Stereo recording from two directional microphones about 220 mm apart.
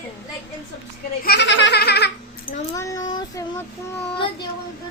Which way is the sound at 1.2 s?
50° left (ahead or behind).